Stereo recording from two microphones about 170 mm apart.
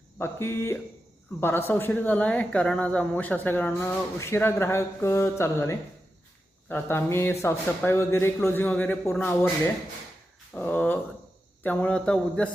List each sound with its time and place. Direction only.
0.2 s speech: 15° left (ahead or behind)
10.5 s speech: 10° left (ahead or behind)